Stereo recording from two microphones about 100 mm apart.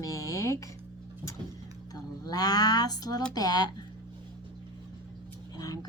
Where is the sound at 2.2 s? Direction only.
40° left (ahead or behind).